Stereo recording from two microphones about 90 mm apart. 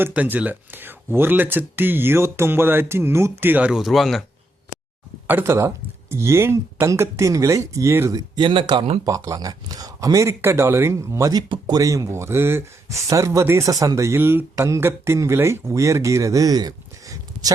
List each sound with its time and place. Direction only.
0.1 s speech: 15° right (ahead or behind)
3.7 s speech: 5° right (ahead or behind)
5.3 s speech: 30° right (ahead or behind)
8.4 s speech: 65° right (ahead or behind)
9.0 s speech: 40° right (ahead or behind)
11.3 s speech: 55° right (ahead or behind)